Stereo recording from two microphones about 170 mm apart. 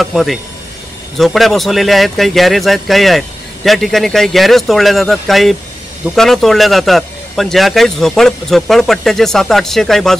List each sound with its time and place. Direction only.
0.0 s speech: centre (ahead or behind)